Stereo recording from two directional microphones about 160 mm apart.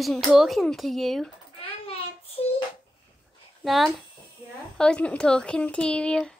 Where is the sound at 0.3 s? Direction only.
Centre (ahead or behind).